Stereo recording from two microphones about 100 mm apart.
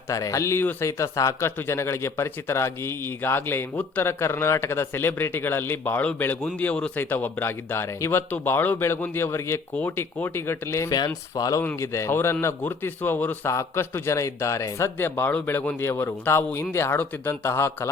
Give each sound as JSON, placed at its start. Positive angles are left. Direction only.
{"t": 0.1, "sound": "speech", "side_deg": 35}
{"t": 10.9, "sound": "speech", "side_deg": 40}
{"t": 11.8, "sound": "speech", "side_deg": 30}